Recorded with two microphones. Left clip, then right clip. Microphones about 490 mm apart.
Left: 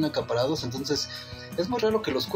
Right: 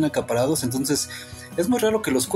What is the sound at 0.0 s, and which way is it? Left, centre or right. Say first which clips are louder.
Speech: right 4 dB; right.